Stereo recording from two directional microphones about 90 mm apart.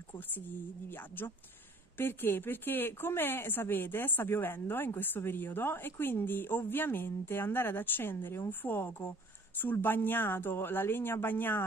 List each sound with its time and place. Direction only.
0.8 s speech: 25° left (ahead or behind)